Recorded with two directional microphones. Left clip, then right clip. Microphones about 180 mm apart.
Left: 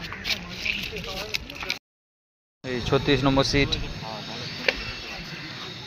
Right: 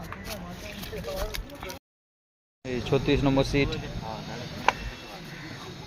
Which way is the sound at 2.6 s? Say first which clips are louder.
Left 3 dB; centre (ahead or behind).